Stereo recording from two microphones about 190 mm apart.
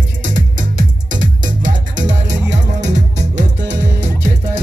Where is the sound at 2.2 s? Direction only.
65° right (ahead or behind).